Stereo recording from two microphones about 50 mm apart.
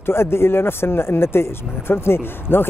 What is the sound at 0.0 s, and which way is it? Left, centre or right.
Speech, left.